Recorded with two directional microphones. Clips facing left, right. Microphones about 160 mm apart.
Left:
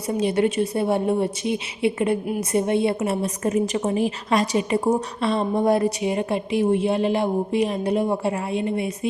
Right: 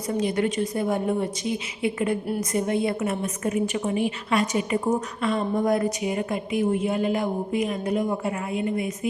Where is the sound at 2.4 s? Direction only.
25° left (ahead or behind).